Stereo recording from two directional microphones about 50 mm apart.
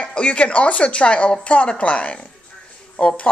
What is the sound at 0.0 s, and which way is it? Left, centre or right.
Speech, left.